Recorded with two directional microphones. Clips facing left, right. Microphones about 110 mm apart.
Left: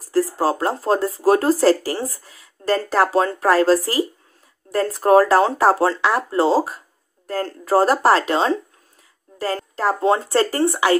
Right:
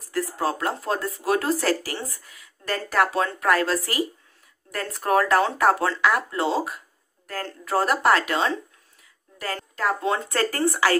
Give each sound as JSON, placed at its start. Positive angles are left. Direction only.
{"t": 0.1, "sound": "speech", "side_deg": 35}